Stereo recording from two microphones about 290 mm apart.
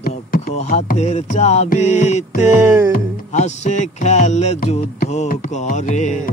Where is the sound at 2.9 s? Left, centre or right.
Left.